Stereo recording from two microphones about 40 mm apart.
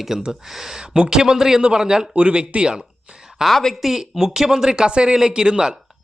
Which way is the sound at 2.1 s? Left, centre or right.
Right.